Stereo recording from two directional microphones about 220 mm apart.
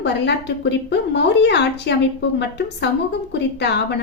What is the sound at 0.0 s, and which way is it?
A woman's voice, 50° left (ahead or behind).